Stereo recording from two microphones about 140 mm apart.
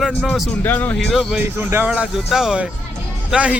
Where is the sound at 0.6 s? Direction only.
15° left (ahead or behind).